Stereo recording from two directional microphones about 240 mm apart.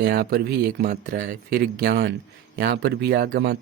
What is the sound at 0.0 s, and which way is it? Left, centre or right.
Speech, right.